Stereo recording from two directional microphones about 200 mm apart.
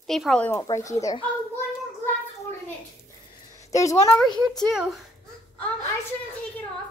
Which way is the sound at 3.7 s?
15° left (ahead or behind).